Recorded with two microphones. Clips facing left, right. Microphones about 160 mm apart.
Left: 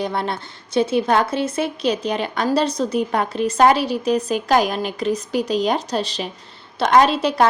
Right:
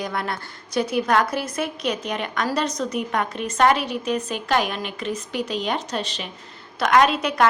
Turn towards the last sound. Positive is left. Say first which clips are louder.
# left 3 dB
turn(degrees=30)  # may be behind; listen again after turning